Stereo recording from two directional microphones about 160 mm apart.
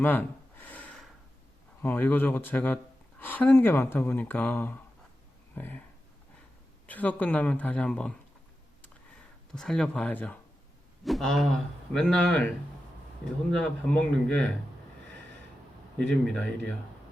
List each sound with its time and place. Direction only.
0.0 s gasp: 10° left (ahead or behind)
1.8 s speech: 10° left (ahead or behind)
6.8 s speech: 10° left (ahead or behind)
9.5 s speech: 5° left (ahead or behind)
13.5 s speech: 5° left (ahead or behind)
16.0 s speech: 5° left (ahead or behind)